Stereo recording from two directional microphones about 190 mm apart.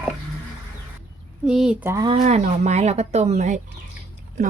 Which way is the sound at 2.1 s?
40° right (ahead or behind).